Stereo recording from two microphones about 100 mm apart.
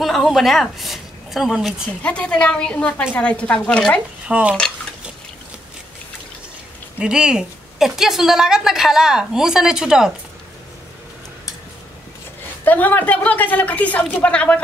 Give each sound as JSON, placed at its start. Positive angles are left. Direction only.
{"t": 0.0, "sound": "a woman's voice", "side_deg": 0}
{"t": 2.0, "sound": "a woman's voice", "side_deg": 10}
{"t": 4.3, "sound": "speech", "side_deg": -10}
{"t": 7.0, "sound": "a woman's voice", "side_deg": -10}
{"t": 12.6, "sound": "a woman's voice", "side_deg": 15}